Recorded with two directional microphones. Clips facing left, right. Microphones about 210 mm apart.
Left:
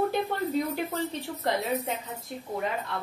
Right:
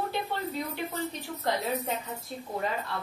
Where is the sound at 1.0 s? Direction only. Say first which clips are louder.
Left 2 dB; 20° left (ahead or behind).